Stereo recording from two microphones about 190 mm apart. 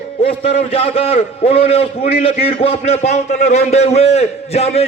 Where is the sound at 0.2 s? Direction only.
30° left (ahead or behind).